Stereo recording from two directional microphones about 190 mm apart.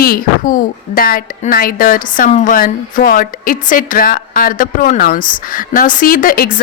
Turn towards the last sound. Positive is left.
turn(degrees=45)  # may be behind; listen again after turning